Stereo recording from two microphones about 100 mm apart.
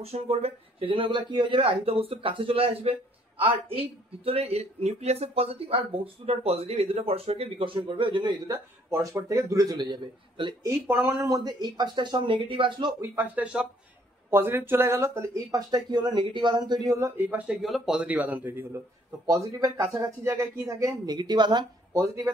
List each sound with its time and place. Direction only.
0.0 s speech: 90° right; by 5.8 s 70° right (ahead or behind)
6.2 s speech: 90° right; by 8.5 s 50° right (ahead or behind)
8.9 s speech: 30° right (ahead or behind); by 10.5 s 50° right (ahead or behind)
10.9 s speech: 20° right (ahead or behind)
11.2 s speech: 40° right (ahead or behind)
13.0 s a man's voice: 20° right (ahead or behind)
14.3 s speech: 25° right (ahead or behind)
17.2 s a man's voice: 20° right (ahead or behind)
17.6 s a man's voice: centre (ahead or behind); by 18.8 s 20° right (ahead or behind)
19.2 s speech: 35° right (ahead or behind)
21.9 s speech: 25° right (ahead or behind)